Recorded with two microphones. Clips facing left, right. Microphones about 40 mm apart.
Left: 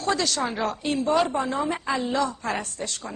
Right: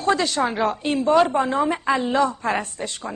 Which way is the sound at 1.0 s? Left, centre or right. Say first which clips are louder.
Right 6 dB; right.